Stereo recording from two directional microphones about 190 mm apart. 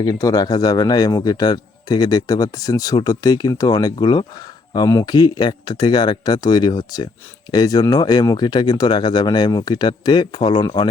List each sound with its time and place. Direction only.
0.0 s a man's voice: 20° left (ahead or behind)